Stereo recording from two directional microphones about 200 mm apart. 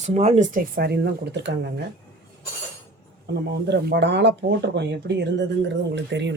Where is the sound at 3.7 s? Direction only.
60° right (ahead or behind).